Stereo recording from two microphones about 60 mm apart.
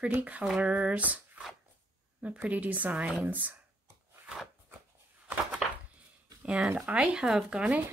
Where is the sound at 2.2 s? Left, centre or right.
Right.